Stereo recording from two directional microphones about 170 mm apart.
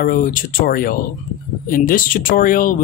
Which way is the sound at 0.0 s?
55° left (ahead or behind).